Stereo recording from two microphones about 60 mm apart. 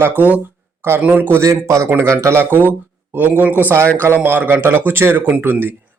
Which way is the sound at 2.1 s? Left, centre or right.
Right.